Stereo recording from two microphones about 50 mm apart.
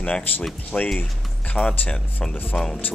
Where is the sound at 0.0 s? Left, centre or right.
Left.